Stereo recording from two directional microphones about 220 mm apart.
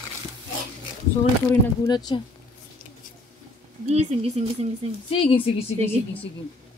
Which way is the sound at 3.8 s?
30° right (ahead or behind).